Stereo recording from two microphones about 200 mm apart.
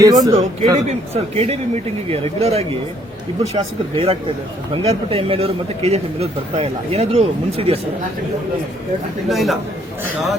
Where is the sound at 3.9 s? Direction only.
30° right (ahead or behind).